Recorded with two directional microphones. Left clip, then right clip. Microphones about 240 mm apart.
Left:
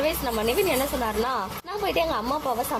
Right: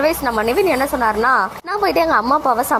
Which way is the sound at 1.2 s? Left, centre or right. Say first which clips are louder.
Right 12 dB; right.